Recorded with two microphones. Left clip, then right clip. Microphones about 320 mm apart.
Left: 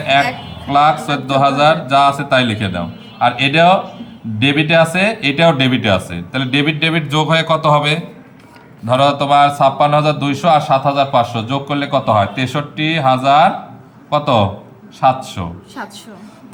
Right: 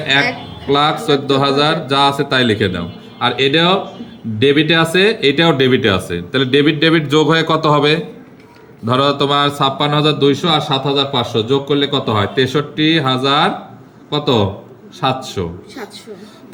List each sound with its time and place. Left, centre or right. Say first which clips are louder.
0.7 s a man's voice: left 1 dB; centre